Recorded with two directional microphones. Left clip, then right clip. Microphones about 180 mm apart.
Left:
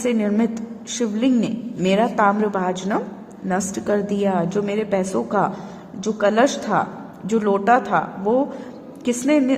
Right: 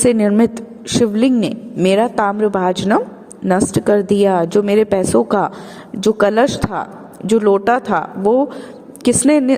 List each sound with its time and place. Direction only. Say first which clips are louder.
0.0 s a woman's voice: right 8 dB; 40° right (ahead or behind)
6.0 s a woman's voice: right 5 dB; 45° right (ahead or behind)